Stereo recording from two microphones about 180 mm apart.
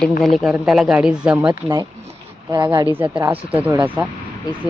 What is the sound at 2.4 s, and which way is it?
Speech, 25° right (ahead or behind).